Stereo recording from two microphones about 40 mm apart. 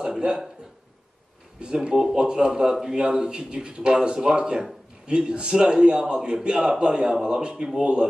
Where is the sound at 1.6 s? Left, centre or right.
Right.